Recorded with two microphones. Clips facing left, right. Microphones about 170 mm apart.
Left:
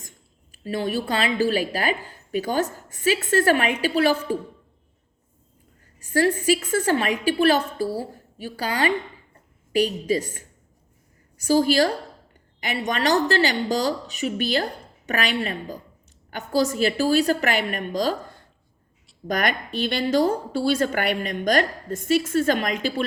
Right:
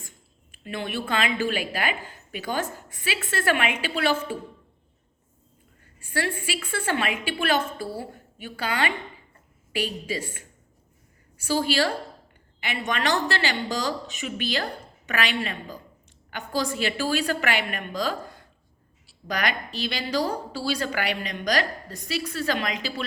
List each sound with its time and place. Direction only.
0.5 s a woman's voice: 40° left (ahead or behind)
6.0 s a woman's voice: 40° left (ahead or behind)
19.3 s a woman's voice: 50° left (ahead or behind)